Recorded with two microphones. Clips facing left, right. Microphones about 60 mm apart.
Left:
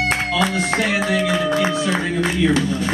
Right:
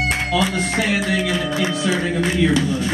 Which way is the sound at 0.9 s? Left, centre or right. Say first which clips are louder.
Left 1 dB; left.